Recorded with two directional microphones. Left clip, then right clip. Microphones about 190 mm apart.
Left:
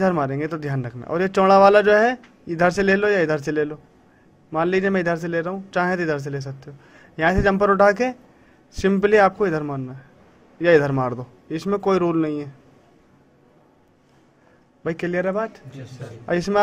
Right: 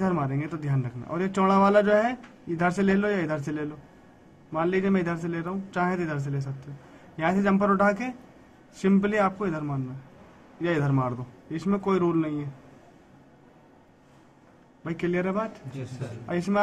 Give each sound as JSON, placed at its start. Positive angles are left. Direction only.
{"t": 0.0, "sound": "a man's voice", "side_deg": 45}
{"t": 14.8, "sound": "a man's voice", "side_deg": 40}